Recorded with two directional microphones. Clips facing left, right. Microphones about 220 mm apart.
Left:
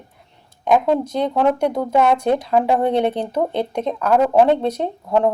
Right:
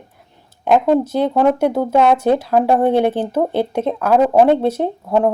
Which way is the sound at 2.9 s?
5° right (ahead or behind).